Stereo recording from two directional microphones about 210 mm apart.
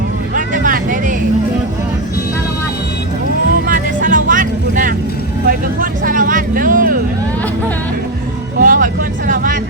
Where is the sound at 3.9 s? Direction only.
40° right (ahead or behind).